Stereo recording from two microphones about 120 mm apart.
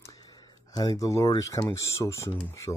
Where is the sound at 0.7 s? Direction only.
30° left (ahead or behind).